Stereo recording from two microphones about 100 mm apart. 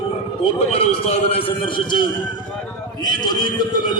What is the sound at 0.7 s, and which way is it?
A man's voice, 90° left.